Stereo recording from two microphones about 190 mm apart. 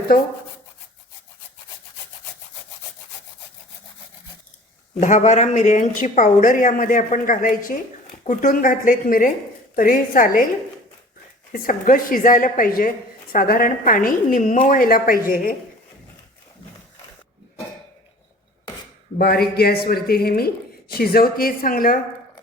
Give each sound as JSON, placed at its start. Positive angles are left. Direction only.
{"t": 4.9, "sound": "speech", "side_deg": 40}
{"t": 11.5, "sound": "speech", "side_deg": 45}
{"t": 19.2, "sound": "speech", "side_deg": 55}